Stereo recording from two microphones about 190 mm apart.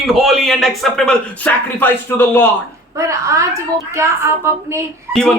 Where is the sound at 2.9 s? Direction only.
15° right (ahead or behind).